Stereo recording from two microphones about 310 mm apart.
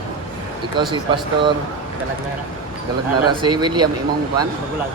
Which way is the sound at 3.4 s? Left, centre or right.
Centre.